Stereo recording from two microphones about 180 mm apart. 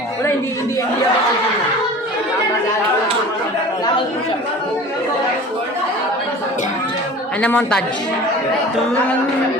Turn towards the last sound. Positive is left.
turn(degrees=5)  # may be behind; listen again after turning